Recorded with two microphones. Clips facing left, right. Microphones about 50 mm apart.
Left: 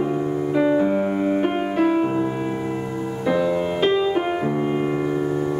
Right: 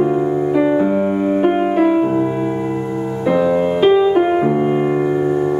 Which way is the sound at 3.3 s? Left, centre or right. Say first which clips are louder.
Right 6 dB; centre.